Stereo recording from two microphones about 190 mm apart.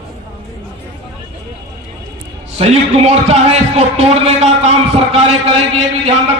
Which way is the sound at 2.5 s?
35° right (ahead or behind).